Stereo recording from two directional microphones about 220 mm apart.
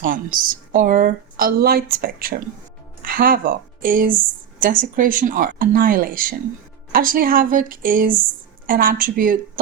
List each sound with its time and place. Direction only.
0.0 s speech: 40° right (ahead or behind)